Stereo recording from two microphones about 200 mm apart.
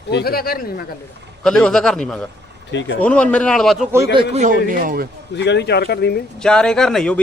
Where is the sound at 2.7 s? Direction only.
65° left (ahead or behind).